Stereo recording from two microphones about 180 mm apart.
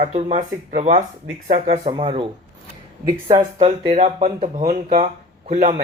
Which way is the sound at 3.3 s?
25° right (ahead or behind).